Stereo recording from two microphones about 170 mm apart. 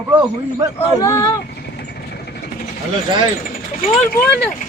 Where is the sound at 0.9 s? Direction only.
20° left (ahead or behind).